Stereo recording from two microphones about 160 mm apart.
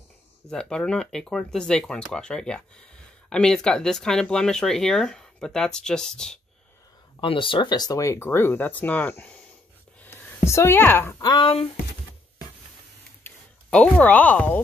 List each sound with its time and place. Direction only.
0.5 s speech: 5° left (ahead or behind)
7.2 s speech: 35° left (ahead or behind); by 11.2 s 15° left (ahead or behind)
11.2 s speech: 30° left (ahead or behind)
13.2 s speech: 10° left (ahead or behind)